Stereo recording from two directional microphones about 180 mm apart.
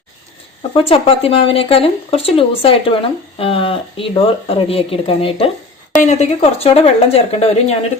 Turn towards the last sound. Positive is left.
turn(degrees=35)  # may be behind; listen again after turning